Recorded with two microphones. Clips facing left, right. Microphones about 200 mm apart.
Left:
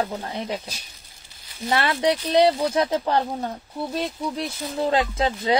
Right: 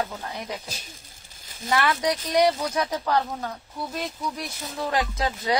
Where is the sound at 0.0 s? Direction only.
25° left (ahead or behind).